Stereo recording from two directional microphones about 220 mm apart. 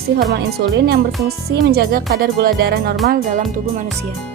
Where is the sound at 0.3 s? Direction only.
50° right (ahead or behind).